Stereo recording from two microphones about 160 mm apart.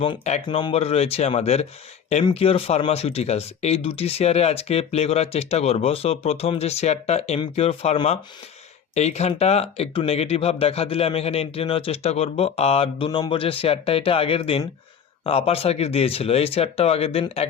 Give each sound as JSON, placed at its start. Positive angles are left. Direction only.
{"t": 0.4, "sound": "speech", "side_deg": 30}
{"t": 13.1, "sound": "speech", "side_deg": 25}